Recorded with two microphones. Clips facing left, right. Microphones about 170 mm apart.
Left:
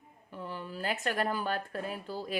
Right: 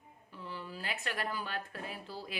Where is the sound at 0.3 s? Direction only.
50° left (ahead or behind).